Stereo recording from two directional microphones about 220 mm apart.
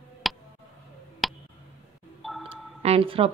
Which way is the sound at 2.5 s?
25° right (ahead or behind).